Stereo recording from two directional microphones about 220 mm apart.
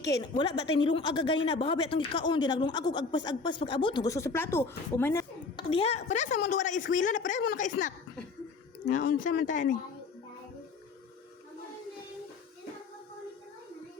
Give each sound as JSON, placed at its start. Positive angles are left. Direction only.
{"t": 0.0, "sound": "speech", "side_deg": 15}
{"t": 5.5, "sound": "a woman's voice", "side_deg": 25}